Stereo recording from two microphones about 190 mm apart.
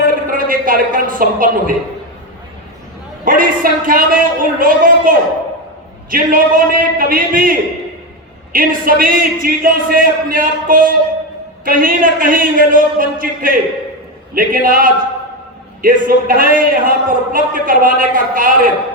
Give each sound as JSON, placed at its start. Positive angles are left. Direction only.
{"t": 0.3, "sound": "speech", "side_deg": -45}
{"t": 3.2, "sound": "a man's voice", "side_deg": -45}
{"t": 8.5, "sound": "a man's voice", "side_deg": -45}